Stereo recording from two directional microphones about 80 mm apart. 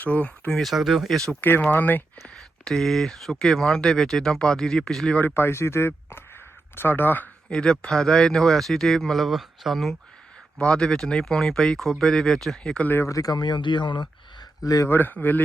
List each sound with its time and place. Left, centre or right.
0.0 s speech: centre
0.6 s speech: centre
1.4 s speech: left
2.6 s speech: centre
5.3 s speech: left
7.5 s speech: centre
12.8 s speech: left
13.1 s speech: left
14.6 s speech: left
14.8 s speech: left